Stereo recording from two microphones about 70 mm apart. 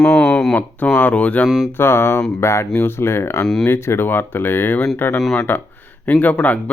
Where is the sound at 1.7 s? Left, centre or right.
Left.